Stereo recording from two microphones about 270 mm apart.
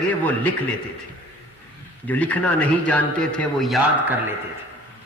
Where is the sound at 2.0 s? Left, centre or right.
Centre.